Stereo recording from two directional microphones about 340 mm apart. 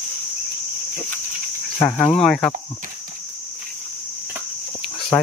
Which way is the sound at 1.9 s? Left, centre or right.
Centre.